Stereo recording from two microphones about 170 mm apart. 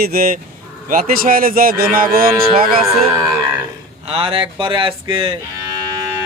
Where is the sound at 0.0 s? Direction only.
60° right (ahead or behind).